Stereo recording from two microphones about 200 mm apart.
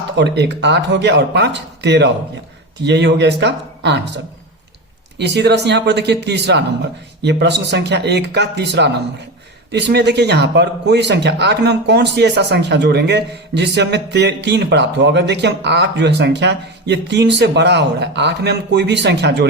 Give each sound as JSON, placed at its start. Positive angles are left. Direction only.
{"t": 0.2, "sound": "speech", "side_deg": -60}